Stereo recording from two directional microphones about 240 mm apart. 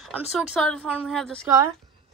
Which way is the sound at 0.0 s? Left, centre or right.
Centre.